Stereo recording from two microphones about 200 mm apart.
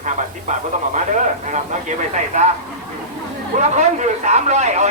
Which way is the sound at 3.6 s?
35° right (ahead or behind).